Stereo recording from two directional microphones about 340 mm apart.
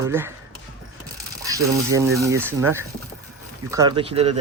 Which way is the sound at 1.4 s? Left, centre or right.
Centre.